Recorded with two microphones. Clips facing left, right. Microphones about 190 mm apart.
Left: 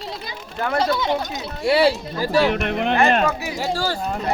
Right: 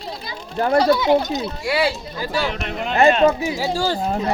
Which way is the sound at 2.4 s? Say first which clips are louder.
Left 5 dB; 55° left (ahead or behind).